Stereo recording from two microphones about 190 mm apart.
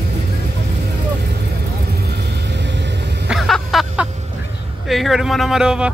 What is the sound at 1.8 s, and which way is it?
Vehicle, 55° right (ahead or behind).